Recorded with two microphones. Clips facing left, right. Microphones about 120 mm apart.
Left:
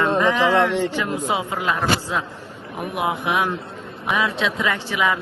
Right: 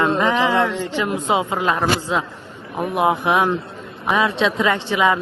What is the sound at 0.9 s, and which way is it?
A man's voice, 25° right (ahead or behind).